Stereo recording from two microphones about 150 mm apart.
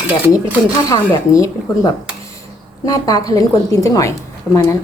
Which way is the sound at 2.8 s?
25° left (ahead or behind).